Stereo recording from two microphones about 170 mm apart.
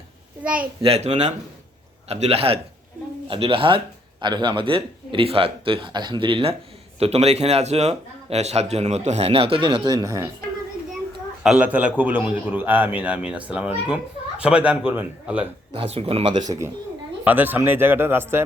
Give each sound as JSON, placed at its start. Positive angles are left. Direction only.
{"t": 0.4, "sound": "a man's voice", "side_deg": -5}
{"t": 0.8, "sound": "a man's voice", "side_deg": -35}
{"t": 11.4, "sound": "a man's voice", "side_deg": -5}
{"t": 15.7, "sound": "a man's voice", "side_deg": -35}